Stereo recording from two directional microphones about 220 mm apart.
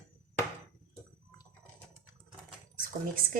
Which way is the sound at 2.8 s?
40° right (ahead or behind).